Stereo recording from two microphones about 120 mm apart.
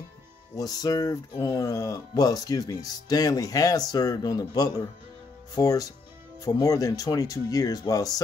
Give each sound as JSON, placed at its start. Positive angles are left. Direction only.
{"t": 0.6, "sound": "speech", "side_deg": 30}